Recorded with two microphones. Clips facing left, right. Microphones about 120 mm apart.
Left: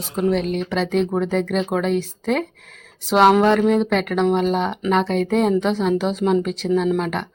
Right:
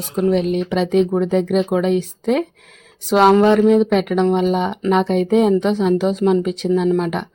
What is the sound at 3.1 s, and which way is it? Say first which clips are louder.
Speech: right 2 dB; centre (ahead or behind).